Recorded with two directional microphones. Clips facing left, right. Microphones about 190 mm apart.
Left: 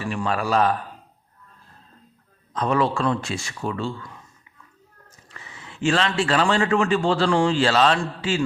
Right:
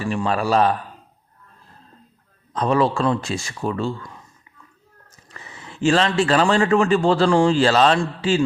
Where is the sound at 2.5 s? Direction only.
35° right (ahead or behind).